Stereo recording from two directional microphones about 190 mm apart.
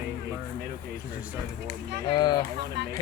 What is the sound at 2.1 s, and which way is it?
Speech, 20° left (ahead or behind).